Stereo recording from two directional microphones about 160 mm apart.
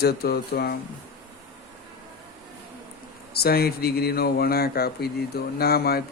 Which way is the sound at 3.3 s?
75° left (ahead or behind).